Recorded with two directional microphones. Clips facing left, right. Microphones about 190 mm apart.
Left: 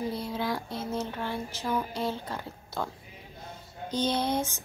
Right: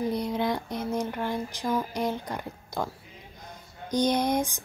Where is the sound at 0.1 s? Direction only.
15° right (ahead or behind).